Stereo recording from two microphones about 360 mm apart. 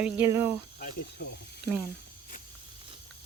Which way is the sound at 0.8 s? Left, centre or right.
Left.